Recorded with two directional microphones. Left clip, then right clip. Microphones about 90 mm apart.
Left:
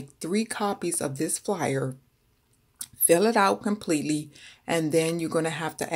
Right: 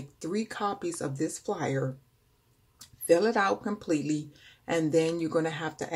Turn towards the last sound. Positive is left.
turn(degrees=30)  # may be behind; listen again after turning